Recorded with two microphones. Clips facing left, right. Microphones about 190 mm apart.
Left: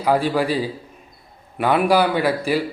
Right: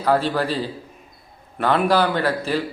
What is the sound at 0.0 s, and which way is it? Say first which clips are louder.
Speech: left 1 dB; 10° left (ahead or behind).